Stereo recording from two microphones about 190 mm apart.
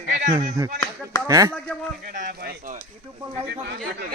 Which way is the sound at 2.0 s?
45° right (ahead or behind).